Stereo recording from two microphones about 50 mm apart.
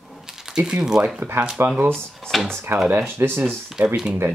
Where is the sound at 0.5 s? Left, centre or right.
Centre.